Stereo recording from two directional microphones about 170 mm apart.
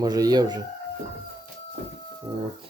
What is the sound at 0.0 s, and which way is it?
Speech, 25° right (ahead or behind).